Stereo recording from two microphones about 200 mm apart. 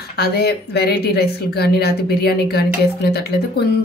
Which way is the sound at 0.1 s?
55° left (ahead or behind).